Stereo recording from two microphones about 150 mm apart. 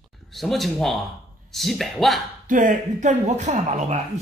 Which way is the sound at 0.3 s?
Centre (ahead or behind).